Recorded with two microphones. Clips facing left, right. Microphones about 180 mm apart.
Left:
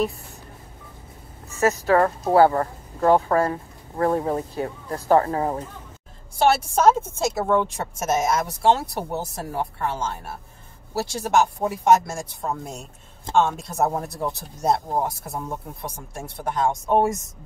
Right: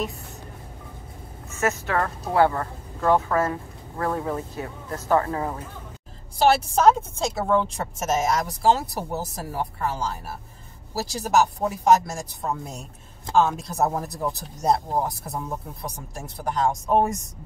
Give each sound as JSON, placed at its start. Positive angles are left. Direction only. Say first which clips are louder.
{"t": 1.5, "sound": "speech", "louder": "left 6 dB", "side_deg": 35}
{"t": 6.3, "sound": "a woman's voice", "louder": "even", "side_deg": 0}